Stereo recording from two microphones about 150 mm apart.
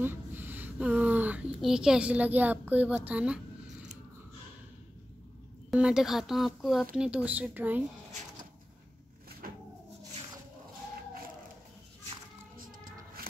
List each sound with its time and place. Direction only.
0.0 s a woman's voice: 15° right (ahead or behind)
5.7 s speech: 5° right (ahead or behind)
9.4 s cupboard open or close: 70° right (ahead or behind)
12.5 s music: 70° right (ahead or behind)